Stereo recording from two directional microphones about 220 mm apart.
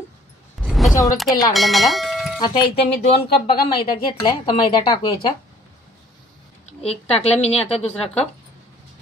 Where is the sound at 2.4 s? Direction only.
20° left (ahead or behind).